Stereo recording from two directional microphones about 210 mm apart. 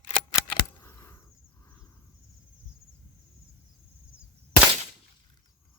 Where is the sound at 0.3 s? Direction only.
10° left (ahead or behind).